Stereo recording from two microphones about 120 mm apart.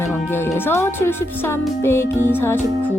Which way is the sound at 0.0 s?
20° left (ahead or behind).